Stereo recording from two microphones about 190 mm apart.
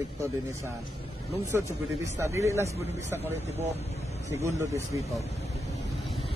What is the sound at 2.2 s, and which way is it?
Speech, 15° right (ahead or behind).